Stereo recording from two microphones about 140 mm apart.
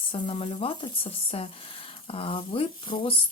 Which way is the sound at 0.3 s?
40° left (ahead or behind).